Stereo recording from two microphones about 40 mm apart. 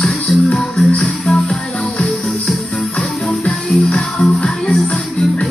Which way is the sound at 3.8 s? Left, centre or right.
Left.